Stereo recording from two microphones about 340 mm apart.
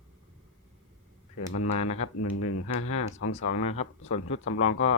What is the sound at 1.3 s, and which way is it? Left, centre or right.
Speech, left.